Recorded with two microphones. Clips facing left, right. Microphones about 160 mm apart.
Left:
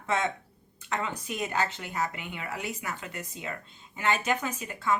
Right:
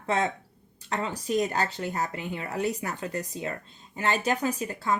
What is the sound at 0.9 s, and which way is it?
Speech, 35° right (ahead or behind).